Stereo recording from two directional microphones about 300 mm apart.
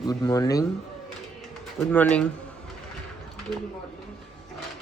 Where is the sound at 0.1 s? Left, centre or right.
Centre.